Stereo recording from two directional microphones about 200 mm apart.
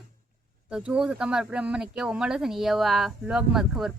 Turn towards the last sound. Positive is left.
turn(degrees=-5)  # may be behind; listen again after turning